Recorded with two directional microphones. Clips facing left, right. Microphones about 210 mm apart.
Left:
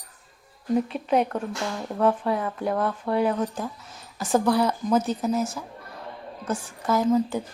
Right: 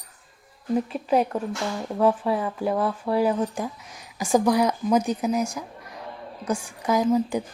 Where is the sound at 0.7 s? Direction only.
Centre (ahead or behind).